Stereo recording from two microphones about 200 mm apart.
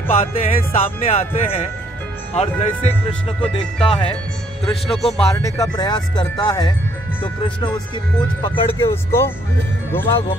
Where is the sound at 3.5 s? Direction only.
25° left (ahead or behind).